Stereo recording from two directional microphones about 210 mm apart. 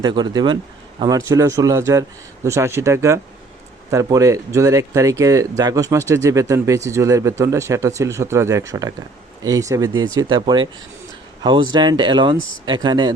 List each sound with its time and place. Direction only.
0.0 s speech: 20° right (ahead or behind)